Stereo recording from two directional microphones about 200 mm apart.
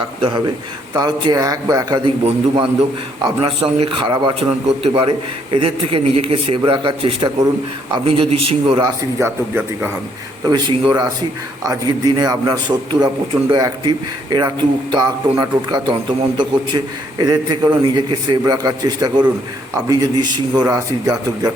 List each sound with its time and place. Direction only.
0.0 s a man's voice: 25° right (ahead or behind)
9.1 s a man's voice: 15° right (ahead or behind)